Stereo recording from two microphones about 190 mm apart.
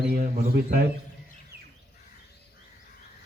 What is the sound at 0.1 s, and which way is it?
Speech, 55° right (ahead or behind).